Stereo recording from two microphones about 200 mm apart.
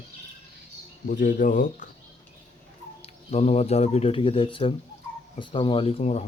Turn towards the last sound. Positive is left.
turn(degrees=30)  # may be behind; listen again after turning